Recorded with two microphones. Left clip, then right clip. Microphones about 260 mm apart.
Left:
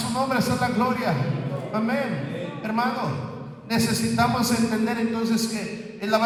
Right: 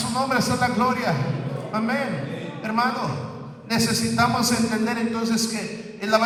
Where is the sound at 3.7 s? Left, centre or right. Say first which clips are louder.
Right 1 dB; right.